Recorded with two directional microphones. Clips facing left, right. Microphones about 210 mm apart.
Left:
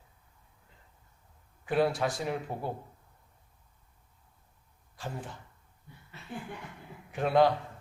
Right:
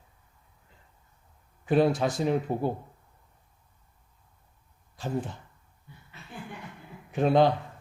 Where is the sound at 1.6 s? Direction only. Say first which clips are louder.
Right 5 dB; 20° right (ahead or behind).